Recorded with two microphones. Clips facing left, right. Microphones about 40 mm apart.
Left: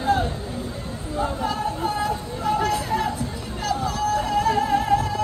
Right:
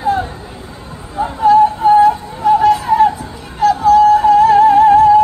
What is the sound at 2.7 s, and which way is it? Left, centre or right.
Music, right.